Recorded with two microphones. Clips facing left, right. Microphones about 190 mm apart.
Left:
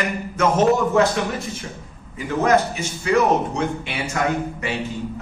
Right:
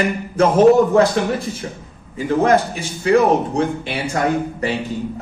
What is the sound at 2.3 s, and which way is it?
Speech, 30° right (ahead or behind).